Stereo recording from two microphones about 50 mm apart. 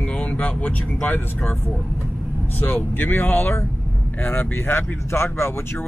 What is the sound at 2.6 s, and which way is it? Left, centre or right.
Speech, left.